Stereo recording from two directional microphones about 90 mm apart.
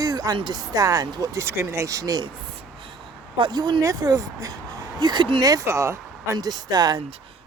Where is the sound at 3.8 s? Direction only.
40° right (ahead or behind).